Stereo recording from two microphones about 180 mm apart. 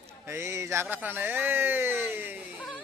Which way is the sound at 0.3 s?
15° right (ahead or behind).